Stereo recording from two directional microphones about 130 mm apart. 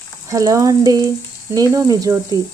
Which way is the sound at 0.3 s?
25° right (ahead or behind).